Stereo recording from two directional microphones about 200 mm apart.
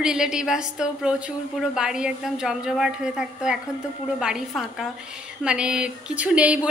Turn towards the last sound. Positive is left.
turn(degrees=-5)  # may be behind; listen again after turning